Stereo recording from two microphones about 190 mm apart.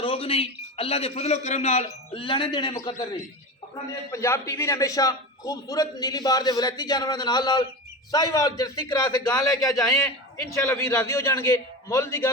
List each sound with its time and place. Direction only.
0.0 s a man's voice: 30° left (ahead or behind)
4.1 s a man's voice: 15° left (ahead or behind)